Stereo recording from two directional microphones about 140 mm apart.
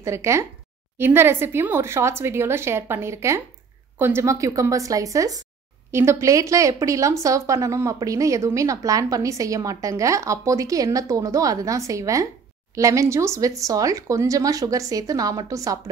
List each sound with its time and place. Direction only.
0.0 s speech: 20° right (ahead or behind)